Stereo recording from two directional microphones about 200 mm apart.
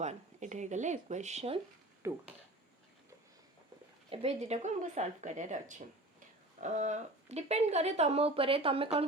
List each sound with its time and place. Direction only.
0.0 s speech: 35° right (ahead or behind)
2.0 s speech: 15° right (ahead or behind)
4.1 s speech: 30° right (ahead or behind)